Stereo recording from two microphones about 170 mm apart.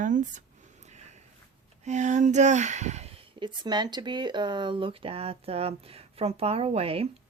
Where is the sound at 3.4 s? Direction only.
25° right (ahead or behind).